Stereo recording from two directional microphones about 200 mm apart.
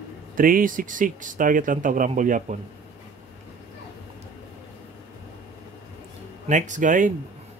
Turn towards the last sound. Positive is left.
turn(degrees=-40)  # may be behind; listen again after turning